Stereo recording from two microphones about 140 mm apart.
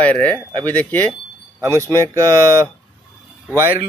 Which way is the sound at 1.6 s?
25° right (ahead or behind).